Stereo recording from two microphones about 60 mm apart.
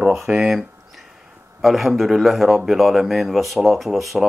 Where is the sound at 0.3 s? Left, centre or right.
Centre.